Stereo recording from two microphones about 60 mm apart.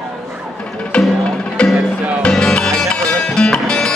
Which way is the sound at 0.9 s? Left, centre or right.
Centre.